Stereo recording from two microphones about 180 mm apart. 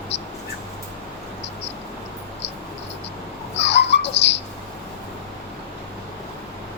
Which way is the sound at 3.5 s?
70° left (ahead or behind).